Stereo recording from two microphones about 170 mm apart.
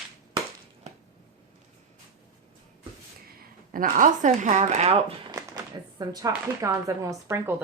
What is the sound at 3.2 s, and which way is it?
Speech, 55° right (ahead or behind).